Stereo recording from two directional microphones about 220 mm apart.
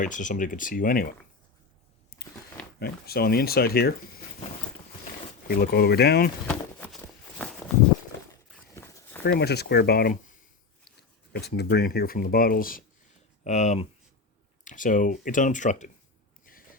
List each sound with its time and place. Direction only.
0.0 s speech: 35° left (ahead or behind)
2.1 s biting: 45° left (ahead or behind)
2.7 s speech: 45° left (ahead or behind)
5.5 s speech: 45° left (ahead or behind)
6.5 s a sound: 5° left (ahead or behind)
8.7 s walk: 10° left (ahead or behind)
9.2 s speech: 50° left (ahead or behind)